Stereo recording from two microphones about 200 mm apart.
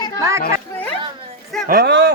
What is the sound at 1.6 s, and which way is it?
Speech, 50° right (ahead or behind).